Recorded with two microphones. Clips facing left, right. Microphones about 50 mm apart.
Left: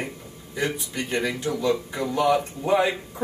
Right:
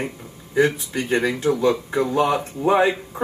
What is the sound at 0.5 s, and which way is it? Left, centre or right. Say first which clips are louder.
Speech: right 8 dB; right.